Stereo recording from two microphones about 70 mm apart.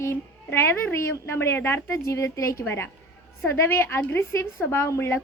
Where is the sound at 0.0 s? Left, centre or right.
Left.